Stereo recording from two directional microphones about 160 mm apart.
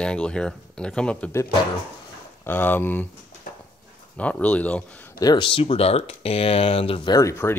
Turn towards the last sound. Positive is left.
turn(degrees=15)  # may be behind; listen again after turning